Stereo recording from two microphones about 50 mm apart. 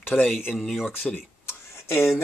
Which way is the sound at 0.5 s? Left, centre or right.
Centre.